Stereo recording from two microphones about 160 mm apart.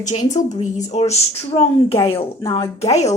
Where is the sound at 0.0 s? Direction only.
50° left (ahead or behind).